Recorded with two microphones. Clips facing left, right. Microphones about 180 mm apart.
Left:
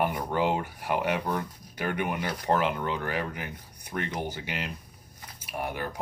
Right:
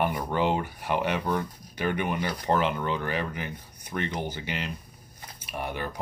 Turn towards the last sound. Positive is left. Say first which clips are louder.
# even
turn(degrees=10)  # may be behind; listen again after turning